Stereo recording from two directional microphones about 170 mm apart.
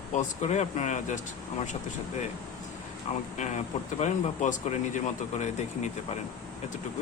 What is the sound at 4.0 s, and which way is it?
Speech, 45° left (ahead or behind).